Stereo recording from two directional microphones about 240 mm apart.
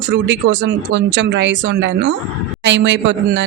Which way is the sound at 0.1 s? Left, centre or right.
Right.